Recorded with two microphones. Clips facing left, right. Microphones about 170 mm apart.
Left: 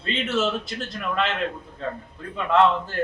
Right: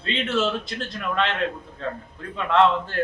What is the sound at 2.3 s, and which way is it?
Speech, 5° left (ahead or behind).